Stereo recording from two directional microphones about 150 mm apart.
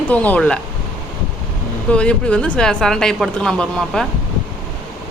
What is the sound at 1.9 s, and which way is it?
Speech, 5° left (ahead or behind).